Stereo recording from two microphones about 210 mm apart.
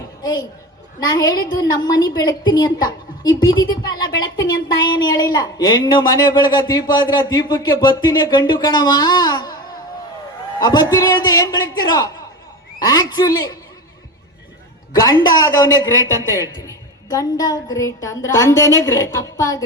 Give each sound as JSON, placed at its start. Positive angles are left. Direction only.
{"t": 0.2, "sound": "a woman's voice", "side_deg": 20}
{"t": 10.6, "sound": "a man's voice", "side_deg": 20}
{"t": 15.0, "sound": "a woman's voice", "side_deg": 20}